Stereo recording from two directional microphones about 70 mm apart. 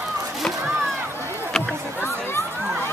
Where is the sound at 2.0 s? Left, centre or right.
Left.